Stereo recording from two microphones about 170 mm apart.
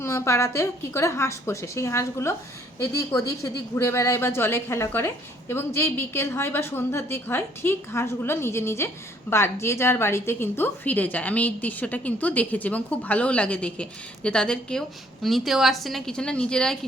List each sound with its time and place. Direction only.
0.0 s speech: 15° left (ahead or behind)